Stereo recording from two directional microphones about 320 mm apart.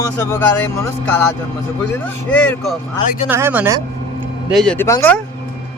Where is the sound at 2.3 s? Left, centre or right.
Centre.